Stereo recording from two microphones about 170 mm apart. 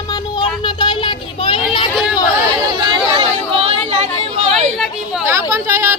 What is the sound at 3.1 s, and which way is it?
Chatter, 35° right (ahead or behind).